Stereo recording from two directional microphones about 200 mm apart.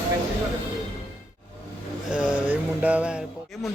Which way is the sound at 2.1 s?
5° right (ahead or behind).